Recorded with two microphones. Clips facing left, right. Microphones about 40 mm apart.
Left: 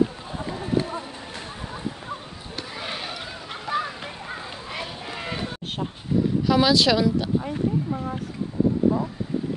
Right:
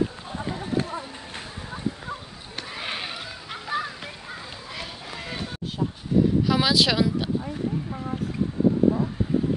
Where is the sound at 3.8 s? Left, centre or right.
Left.